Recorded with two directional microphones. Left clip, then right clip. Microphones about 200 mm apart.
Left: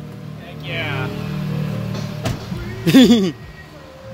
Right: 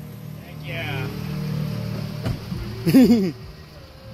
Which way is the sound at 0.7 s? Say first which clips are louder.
Left 6 dB; 55° left (ahead or behind).